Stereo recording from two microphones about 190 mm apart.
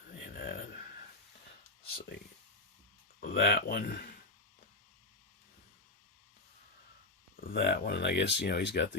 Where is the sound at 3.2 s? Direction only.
60° left (ahead or behind).